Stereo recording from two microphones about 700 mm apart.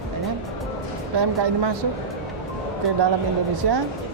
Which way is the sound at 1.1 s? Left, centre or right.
Right.